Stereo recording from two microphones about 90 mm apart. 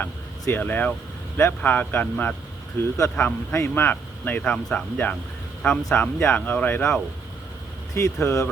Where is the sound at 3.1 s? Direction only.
20° left (ahead or behind).